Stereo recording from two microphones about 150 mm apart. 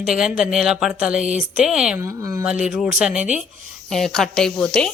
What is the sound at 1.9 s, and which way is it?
Speech, 20° right (ahead or behind).